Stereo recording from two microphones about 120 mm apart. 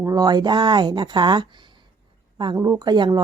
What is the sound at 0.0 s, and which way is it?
Speech, 30° right (ahead or behind).